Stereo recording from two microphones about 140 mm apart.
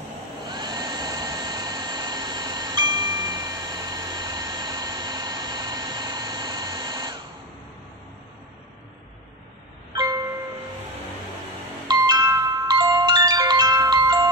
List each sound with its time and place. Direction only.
0.5 s vacuum cleaner: 30° right (ahead or behind)
9.9 s music: 25° right (ahead or behind)
11.9 s music: 30° right (ahead or behind)